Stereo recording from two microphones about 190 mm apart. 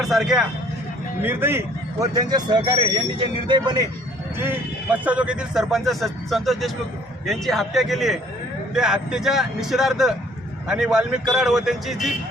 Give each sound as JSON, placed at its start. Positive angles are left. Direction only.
{"t": 0.0, "sound": "a man's voice", "side_deg": 0}
{"t": 4.4, "sound": "a man's voice", "side_deg": -10}